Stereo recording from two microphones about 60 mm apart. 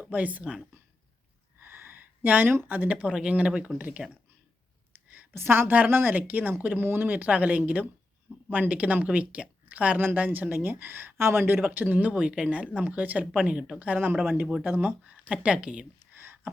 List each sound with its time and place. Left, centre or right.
0.0 s speech: right
1.5 s speech: right
5.3 s speech: right
11.6 s a woman's voice: right
16.1 s rowboat: right